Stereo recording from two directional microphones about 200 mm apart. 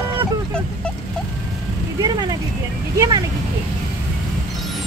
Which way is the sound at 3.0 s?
20° right (ahead or behind).